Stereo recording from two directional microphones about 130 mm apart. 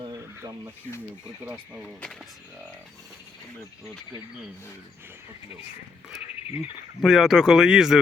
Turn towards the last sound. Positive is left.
turn(degrees=-5)  # may be behind; listen again after turning